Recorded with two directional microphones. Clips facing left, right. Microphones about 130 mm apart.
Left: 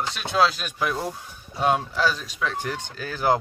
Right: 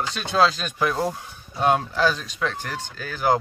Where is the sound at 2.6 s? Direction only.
25° left (ahead or behind).